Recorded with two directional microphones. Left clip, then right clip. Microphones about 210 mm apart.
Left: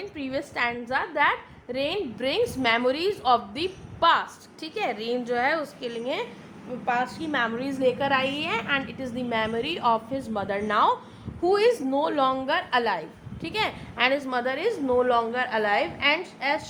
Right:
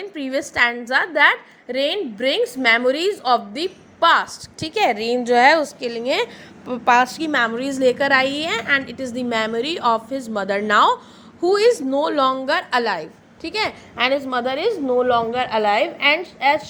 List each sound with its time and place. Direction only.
0.1 s a woman's voice: 15° right (ahead or behind)
6.7 s a woman's voice: 35° right (ahead or behind)
7.3 s a woman's voice: 20° right (ahead or behind)